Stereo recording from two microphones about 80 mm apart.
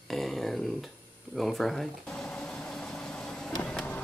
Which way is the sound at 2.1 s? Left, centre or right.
Centre.